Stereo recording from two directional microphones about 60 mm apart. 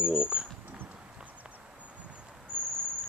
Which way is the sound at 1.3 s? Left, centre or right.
Right.